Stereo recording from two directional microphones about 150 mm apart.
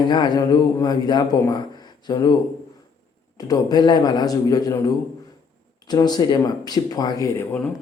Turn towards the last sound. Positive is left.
turn(degrees=20)  # may be behind; listen again after turning